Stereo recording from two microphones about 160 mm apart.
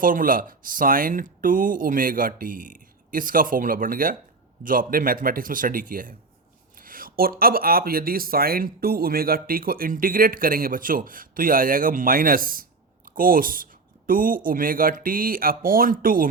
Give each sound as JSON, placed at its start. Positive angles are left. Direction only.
{"t": 0.0, "sound": "speech", "side_deg": -60}